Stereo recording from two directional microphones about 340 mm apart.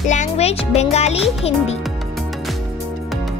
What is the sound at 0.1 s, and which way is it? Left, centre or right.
A child's voice, centre.